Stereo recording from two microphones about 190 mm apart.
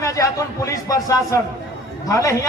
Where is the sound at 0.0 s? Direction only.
15° left (ahead or behind).